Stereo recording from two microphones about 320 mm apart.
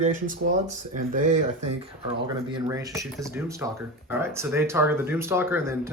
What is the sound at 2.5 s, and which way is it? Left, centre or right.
Speech, centre.